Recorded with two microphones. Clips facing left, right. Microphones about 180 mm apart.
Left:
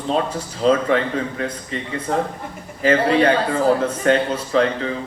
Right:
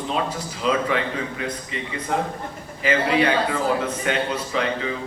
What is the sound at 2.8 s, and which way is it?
A man's voice, 40° left (ahead or behind).